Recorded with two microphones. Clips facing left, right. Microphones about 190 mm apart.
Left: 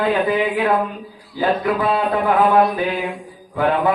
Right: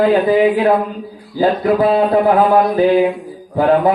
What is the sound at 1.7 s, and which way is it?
Mantra, 35° right (ahead or behind).